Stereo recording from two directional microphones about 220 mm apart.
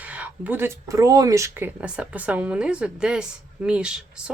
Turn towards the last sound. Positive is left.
turn(degrees=-5)  # may be behind; listen again after turning